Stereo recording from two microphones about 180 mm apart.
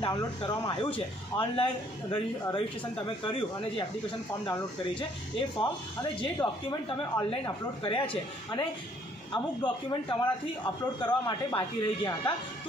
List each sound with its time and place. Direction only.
0.0 s a man's voice: 20° left (ahead or behind)
3.3 s a man's voice: 25° left (ahead or behind)
9.3 s a man's voice: 25° left (ahead or behind)